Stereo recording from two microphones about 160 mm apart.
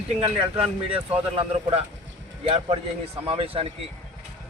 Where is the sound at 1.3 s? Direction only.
35° right (ahead or behind).